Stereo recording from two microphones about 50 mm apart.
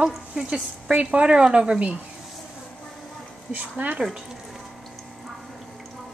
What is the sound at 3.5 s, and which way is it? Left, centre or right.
Speech, right.